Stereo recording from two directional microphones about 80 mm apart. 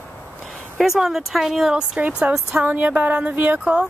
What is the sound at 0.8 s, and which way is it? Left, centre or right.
Speech, centre.